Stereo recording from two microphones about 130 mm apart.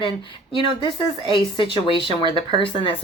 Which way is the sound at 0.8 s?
40° left (ahead or behind).